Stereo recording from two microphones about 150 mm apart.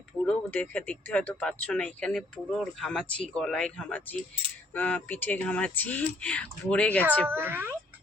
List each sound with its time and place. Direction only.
0.3 s speech: 10° left (ahead or behind)
7.3 s a child's voice: 15° right (ahead or behind)